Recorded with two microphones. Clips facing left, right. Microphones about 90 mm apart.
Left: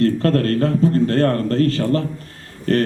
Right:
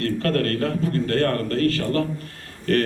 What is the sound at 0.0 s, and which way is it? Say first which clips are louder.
A man's voice: left 5 dB; 30° left (ahead or behind).